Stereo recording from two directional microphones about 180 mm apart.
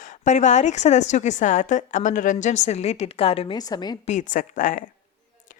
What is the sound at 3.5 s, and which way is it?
Speech, 20° left (ahead or behind).